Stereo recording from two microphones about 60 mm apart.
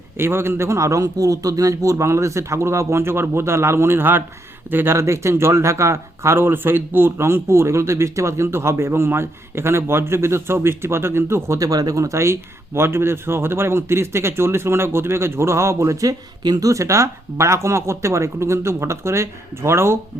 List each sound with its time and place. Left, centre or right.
0.2 s speech: right
0.8 s speech: right
4.9 s speech: right